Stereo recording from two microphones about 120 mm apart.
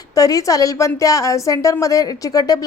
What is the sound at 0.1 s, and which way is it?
Speech, 30° left (ahead or behind).